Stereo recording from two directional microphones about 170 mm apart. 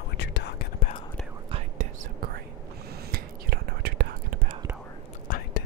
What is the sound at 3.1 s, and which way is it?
Whispering, 65° right (ahead or behind).